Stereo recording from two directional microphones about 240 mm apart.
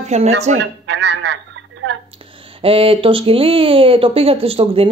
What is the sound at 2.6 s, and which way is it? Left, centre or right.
Speech, right.